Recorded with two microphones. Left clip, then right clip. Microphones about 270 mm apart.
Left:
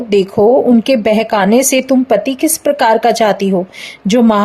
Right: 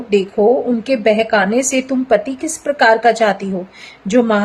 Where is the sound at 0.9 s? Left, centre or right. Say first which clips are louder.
Left 2 dB; left.